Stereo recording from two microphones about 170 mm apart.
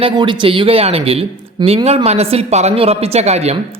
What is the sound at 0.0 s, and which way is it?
A woman's voice, 30° right (ahead or behind).